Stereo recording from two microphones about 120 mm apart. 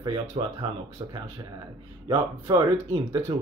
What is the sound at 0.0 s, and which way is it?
Speech, 40° right (ahead or behind).